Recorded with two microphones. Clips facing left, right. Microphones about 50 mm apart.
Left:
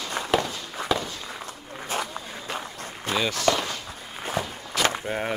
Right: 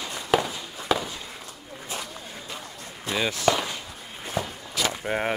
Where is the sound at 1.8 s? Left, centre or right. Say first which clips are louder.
Left 6 dB; left.